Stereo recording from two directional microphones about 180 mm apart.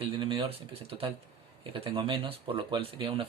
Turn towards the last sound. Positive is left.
turn(degrees=-30)  # may be behind; listen again after turning